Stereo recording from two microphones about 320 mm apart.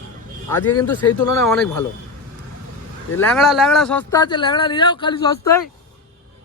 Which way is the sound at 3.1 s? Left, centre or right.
Centre.